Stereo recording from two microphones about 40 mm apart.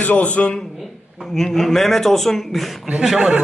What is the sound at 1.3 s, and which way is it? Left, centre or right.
Speech, centre.